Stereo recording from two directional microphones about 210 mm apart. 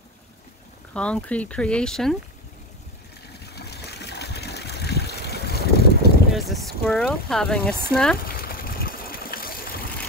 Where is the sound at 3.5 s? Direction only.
50° left (ahead or behind).